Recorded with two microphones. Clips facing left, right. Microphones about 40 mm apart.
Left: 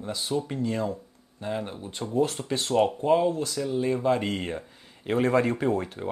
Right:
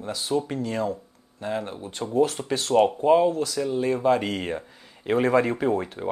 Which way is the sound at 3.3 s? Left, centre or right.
Right.